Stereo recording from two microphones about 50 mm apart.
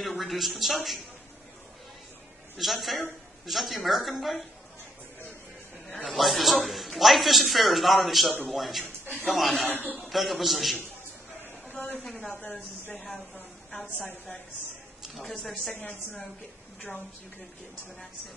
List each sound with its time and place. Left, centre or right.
0.2 s a man's voice: centre
2.5 s a man's voice: centre
5.9 s a man's voice: centre
11.8 s a woman's voice: centre
12.9 s a man's voice: centre
15.0 s speech: centre
15.7 s a woman's voice: left